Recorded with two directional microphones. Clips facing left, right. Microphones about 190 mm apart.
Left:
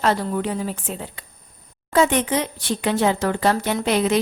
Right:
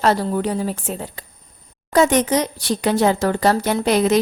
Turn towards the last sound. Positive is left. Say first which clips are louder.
# right 3 dB
turn(degrees=-40)  # may be behind; listen again after turning